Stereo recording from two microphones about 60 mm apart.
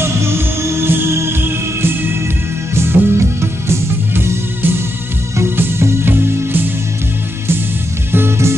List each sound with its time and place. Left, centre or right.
0.0 s music: right
2.7 s music: right
8.1 s music: right